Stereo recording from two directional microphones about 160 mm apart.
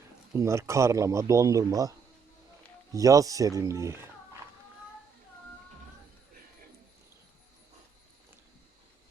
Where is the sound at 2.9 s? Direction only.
20° right (ahead or behind).